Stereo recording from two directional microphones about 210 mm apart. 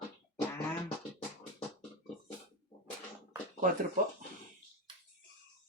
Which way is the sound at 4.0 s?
40° right (ahead or behind).